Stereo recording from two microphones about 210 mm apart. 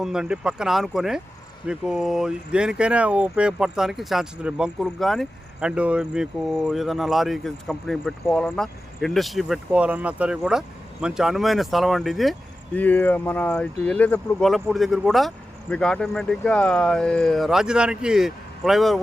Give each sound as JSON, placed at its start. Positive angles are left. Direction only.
{"t": 0.0, "sound": "speech", "side_deg": -5}